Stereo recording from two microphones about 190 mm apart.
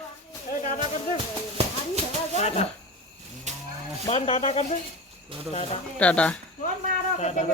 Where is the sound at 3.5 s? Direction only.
40° right (ahead or behind).